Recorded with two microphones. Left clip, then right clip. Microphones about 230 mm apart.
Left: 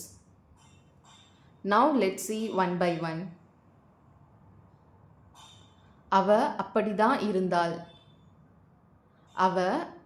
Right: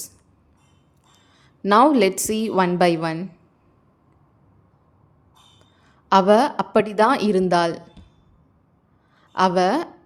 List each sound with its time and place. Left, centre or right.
1.6 s a woman's voice: right
6.1 s a woman's voice: right
9.3 s a woman's voice: right